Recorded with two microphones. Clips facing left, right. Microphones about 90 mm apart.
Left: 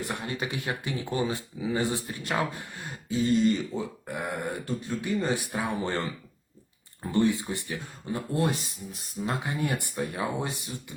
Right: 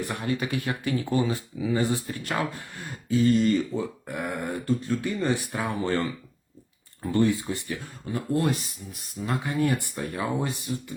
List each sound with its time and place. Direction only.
0.0 s speech: 25° left (ahead or behind)
7.1 s speech: 20° left (ahead or behind)